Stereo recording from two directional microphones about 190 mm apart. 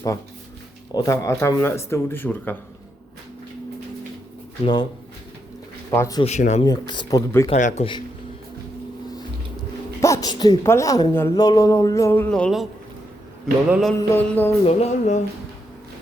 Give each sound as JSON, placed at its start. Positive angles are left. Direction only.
{"t": 0.9, "sound": "a woman's voice", "side_deg": 15}
{"t": 4.6, "sound": "speech", "side_deg": 25}
{"t": 5.9, "sound": "a woman's voice", "side_deg": 15}
{"t": 6.2, "sound": "speech", "side_deg": 35}
{"t": 6.7, "sound": "speech", "side_deg": 25}
{"t": 7.5, "sound": "speech", "side_deg": 35}
{"t": 10.0, "sound": "a woman's voice", "side_deg": 15}
{"t": 13.7, "sound": "music", "side_deg": -5}
{"t": 14.1, "sound": "a woman's voice", "side_deg": 10}
{"t": 14.7, "sound": "speech", "side_deg": 35}